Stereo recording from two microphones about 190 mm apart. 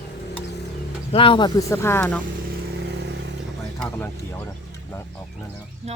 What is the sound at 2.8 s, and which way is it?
Vehicle, 65° right (ahead or behind).